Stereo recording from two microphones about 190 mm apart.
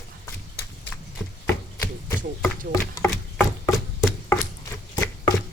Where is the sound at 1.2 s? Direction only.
5° left (ahead or behind).